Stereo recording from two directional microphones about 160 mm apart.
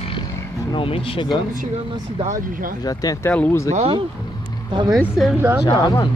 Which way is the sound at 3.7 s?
40° right (ahead or behind).